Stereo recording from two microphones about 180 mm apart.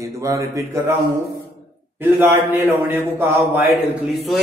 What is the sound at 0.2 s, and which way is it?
Speech, 15° right (ahead or behind).